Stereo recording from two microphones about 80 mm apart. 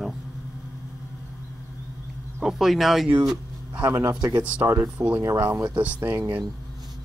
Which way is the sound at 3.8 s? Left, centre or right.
Right.